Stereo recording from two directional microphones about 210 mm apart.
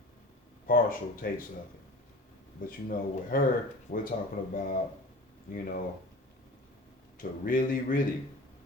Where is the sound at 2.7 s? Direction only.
40° left (ahead or behind).